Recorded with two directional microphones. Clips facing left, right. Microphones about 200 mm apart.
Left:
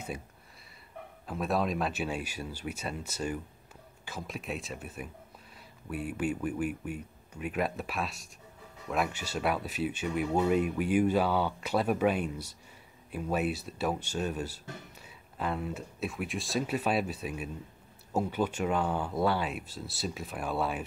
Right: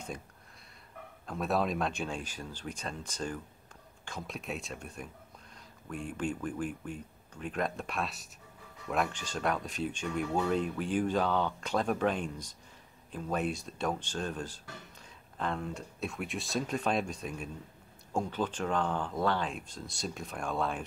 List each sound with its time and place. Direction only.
1.2 s speech: centre (ahead or behind)